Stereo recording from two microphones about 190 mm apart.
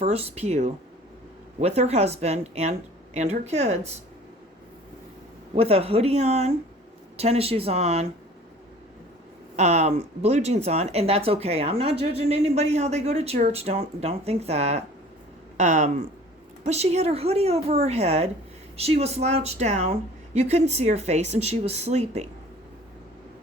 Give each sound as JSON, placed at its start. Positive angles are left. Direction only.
{"t": 0.0, "sound": "speech", "side_deg": -30}
{"t": 5.5, "sound": "speech", "side_deg": -30}
{"t": 9.6, "sound": "speech", "side_deg": -35}